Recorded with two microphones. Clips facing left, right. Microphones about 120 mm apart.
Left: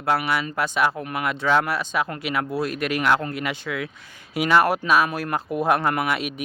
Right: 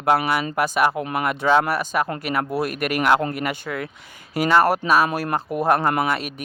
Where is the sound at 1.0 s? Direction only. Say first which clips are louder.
Right 3 dB; 30° right (ahead or behind).